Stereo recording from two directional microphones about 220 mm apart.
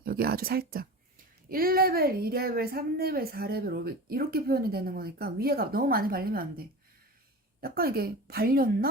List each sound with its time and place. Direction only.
0.0 s a woman's voice: 45° right (ahead or behind)